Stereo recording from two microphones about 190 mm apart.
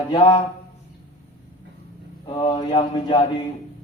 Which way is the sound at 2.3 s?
25° left (ahead or behind).